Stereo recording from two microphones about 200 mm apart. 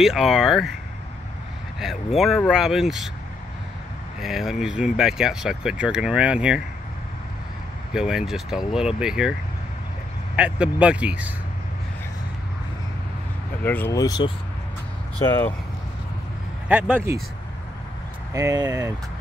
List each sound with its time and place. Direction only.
0.0 s speech: centre (ahead or behind)
2.1 s speech: centre (ahead or behind)
4.2 s speech: centre (ahead or behind)
7.9 s speech: 5° right (ahead or behind)
10.3 s speech: 5° right (ahead or behind)
13.6 s speech: 10° left (ahead or behind)
16.6 s speech: 5° right (ahead or behind)
18.3 s speech: 15° right (ahead or behind)